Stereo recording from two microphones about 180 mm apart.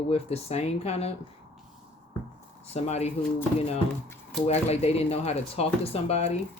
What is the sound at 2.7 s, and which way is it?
Speech, 35° left (ahead or behind).